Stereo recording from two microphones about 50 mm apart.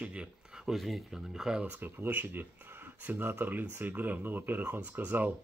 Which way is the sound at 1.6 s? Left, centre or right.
Right.